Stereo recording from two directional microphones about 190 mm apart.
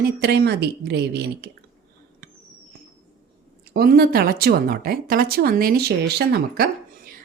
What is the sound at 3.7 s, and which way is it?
Speech, 55° right (ahead or behind).